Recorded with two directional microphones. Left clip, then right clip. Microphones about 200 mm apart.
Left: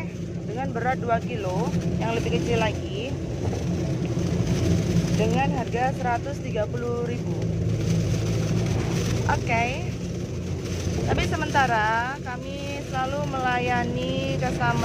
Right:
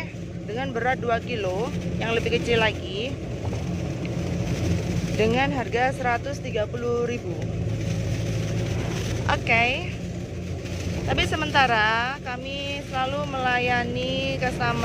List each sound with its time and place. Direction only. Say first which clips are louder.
0.6 s speech: right 2 dB; 15° right (ahead or behind)
5.2 s speech: right 4 dB; 15° right (ahead or behind)
9.3 s speech: right 4 dB; 15° right (ahead or behind)
11.1 s speech: right 2 dB; 10° right (ahead or behind)